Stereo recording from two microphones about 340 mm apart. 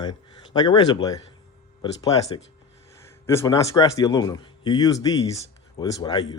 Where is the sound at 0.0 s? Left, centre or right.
Centre.